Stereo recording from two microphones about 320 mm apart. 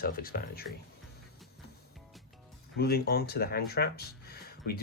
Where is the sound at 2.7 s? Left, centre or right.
Left.